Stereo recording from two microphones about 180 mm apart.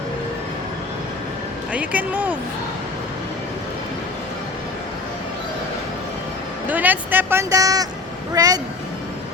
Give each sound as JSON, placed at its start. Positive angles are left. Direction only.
{"t": 1.7, "sound": "speech", "side_deg": -10}
{"t": 6.7, "sound": "speech", "side_deg": -10}